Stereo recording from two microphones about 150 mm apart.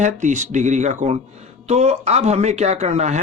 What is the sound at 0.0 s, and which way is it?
Speech, 55° right (ahead or behind).